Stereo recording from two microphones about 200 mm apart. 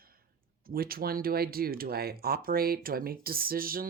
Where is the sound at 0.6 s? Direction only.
50° right (ahead or behind).